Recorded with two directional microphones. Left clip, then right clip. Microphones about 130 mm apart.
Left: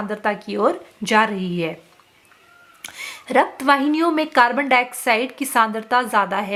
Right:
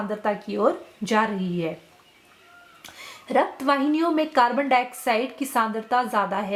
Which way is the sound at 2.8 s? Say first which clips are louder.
Left 9 dB; 40° left (ahead or behind).